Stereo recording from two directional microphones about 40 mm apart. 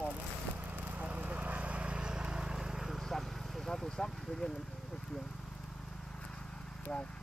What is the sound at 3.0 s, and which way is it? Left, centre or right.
Vehicle, centre.